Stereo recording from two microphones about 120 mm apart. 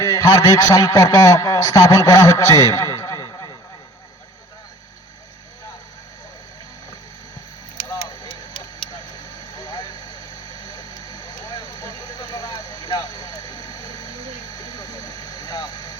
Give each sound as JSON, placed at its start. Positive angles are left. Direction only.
{"t": 0.0, "sound": "a man's voice", "side_deg": 30}
{"t": 8.9, "sound": "a sound", "side_deg": 35}
{"t": 10.8, "sound": "vehicle", "side_deg": 35}